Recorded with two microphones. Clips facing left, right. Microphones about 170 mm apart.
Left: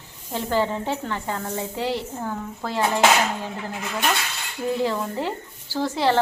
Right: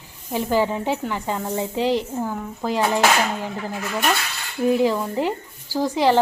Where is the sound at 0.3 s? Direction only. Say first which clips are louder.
Right 3 dB; 15° right (ahead or behind).